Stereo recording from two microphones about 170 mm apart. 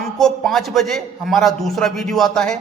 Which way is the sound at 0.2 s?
Centre (ahead or behind).